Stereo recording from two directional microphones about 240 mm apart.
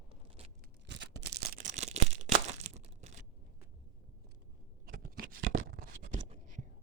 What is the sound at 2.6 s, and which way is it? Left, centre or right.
Crumpling, right.